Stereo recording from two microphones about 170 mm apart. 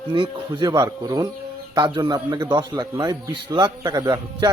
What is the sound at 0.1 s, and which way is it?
A man's voice, 25° right (ahead or behind).